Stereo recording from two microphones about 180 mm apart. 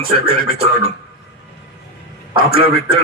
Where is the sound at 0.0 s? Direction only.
60° left (ahead or behind).